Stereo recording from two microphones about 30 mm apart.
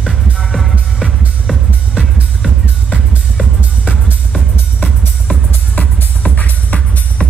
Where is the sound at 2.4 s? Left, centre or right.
Right.